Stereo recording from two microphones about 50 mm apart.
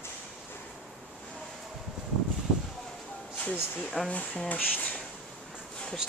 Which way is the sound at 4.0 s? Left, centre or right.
Centre.